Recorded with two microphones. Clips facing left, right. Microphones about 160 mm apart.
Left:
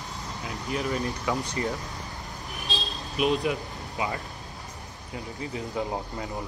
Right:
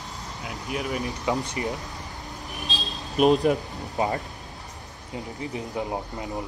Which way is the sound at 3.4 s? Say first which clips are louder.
Right 6 dB; 40° right (ahead or behind).